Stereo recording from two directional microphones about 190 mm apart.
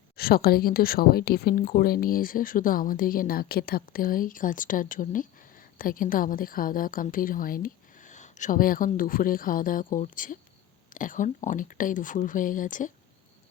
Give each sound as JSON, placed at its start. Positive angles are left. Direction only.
{"t": 0.2, "sound": "a woman's voice", "side_deg": 55}